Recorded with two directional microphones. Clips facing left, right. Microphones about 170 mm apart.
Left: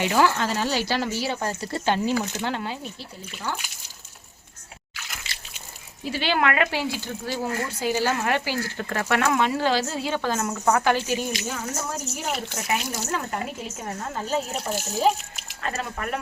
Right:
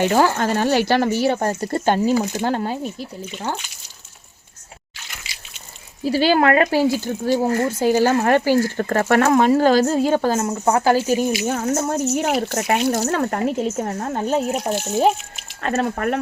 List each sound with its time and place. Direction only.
0.0 s speech: 45° right (ahead or behind)
6.1 s speech: 40° right (ahead or behind)
10.4 s speech: 30° right (ahead or behind); by 11.9 s 50° right (ahead or behind)
12.1 s speech: 65° right (ahead or behind); by 16.2 s 45° right (ahead or behind)